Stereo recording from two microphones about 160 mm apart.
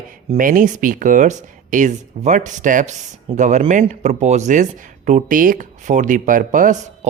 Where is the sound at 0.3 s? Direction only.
60° right (ahead or behind).